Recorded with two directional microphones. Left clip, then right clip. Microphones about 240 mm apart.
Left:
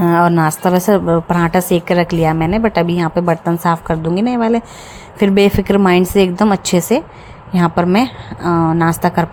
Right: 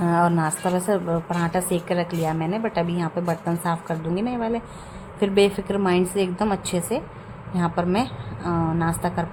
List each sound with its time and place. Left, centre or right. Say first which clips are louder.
0.0 s a woman's voice: left 9 dB; left